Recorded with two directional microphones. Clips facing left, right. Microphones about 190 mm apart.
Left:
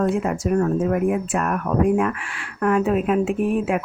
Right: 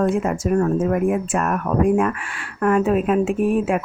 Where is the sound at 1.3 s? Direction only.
45° right (ahead or behind).